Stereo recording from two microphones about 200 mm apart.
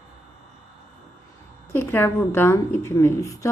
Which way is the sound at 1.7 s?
10° left (ahead or behind).